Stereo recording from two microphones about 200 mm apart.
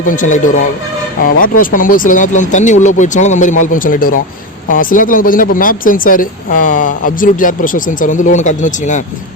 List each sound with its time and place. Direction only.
0.0 s speech: 40° left (ahead or behind)